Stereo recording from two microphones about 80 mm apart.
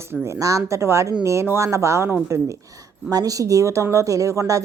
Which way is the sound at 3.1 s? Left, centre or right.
Right.